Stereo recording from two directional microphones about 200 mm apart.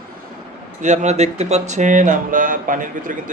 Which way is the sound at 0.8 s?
35° right (ahead or behind).